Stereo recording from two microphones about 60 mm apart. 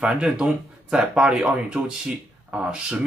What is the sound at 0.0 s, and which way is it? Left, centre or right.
Speech, centre.